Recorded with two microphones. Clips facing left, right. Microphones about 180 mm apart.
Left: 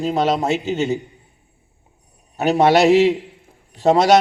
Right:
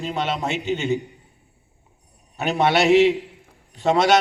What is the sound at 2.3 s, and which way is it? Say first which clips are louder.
A man's voice: left 5 dB; 40° left (ahead or behind).